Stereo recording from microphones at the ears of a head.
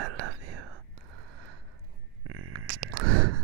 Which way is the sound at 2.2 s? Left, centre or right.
Right.